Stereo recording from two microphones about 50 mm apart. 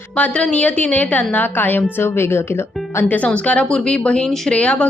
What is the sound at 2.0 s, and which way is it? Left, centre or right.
Speech, left.